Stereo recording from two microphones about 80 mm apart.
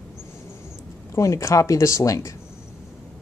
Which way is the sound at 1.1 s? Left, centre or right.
Left.